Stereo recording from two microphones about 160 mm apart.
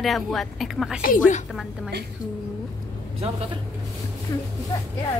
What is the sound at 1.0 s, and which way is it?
Speech, 55° left (ahead or behind).